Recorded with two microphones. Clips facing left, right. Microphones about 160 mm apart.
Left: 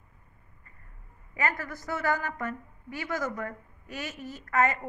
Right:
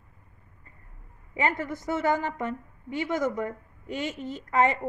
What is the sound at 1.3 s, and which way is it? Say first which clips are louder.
A woman's voice: right 4 dB; 25° right (ahead or behind).